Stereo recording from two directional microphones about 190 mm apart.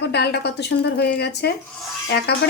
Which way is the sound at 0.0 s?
65° left (ahead or behind).